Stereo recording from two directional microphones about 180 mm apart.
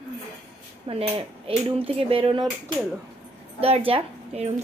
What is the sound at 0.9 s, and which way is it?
Speech, 30° right (ahead or behind).